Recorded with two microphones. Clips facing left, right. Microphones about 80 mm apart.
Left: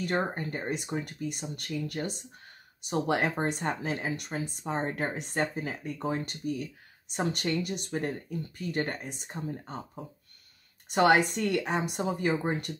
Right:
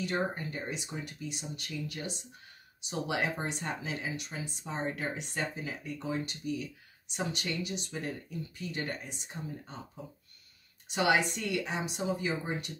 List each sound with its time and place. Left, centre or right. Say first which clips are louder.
0.0 s speech: left 3 dB; left
10.9 s speech: left 5 dB; left